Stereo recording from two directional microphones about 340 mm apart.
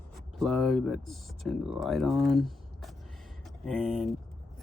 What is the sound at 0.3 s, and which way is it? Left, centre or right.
Speech, centre.